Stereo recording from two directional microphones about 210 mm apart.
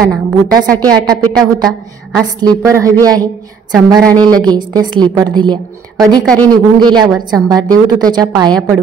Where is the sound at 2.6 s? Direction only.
15° right (ahead or behind).